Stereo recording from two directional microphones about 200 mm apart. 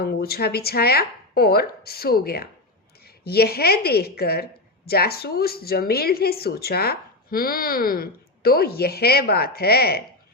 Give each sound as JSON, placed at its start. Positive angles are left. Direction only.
{"t": 0.0, "sound": "a woman's voice", "side_deg": 50}